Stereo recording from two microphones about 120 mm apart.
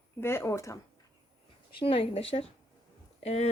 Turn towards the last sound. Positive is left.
turn(degrees=65)  # may be behind; listen again after turning